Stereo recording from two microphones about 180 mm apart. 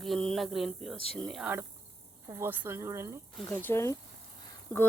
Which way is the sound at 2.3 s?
10° right (ahead or behind).